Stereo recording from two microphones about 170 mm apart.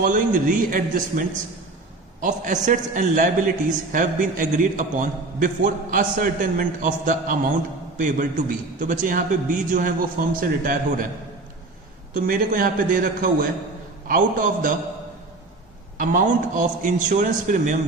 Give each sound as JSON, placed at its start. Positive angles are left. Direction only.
{"t": 0.0, "sound": "a man's voice", "side_deg": -55}
{"t": 2.2, "sound": "a man's voice", "side_deg": -45}
{"t": 12.1, "sound": "a man's voice", "side_deg": -50}
{"t": 16.0, "sound": "a man's voice", "side_deg": -50}